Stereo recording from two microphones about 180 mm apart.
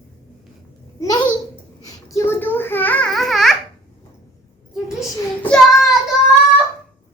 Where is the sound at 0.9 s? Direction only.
20° left (ahead or behind); by 3.5 s centre (ahead or behind).